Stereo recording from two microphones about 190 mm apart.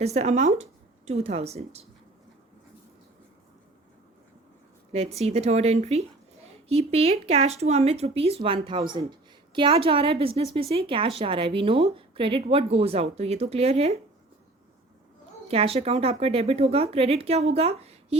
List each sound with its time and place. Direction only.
0.0 s speech: 35° right (ahead or behind)
4.9 s a woman's voice: 35° right (ahead or behind)
15.4 s speech: 30° right (ahead or behind)